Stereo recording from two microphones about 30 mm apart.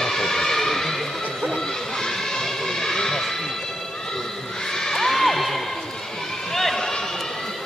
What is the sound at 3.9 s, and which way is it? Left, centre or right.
Children shouting, centre.